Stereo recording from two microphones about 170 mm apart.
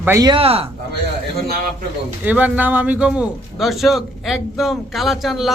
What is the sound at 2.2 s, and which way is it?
Speech, 10° right (ahead or behind).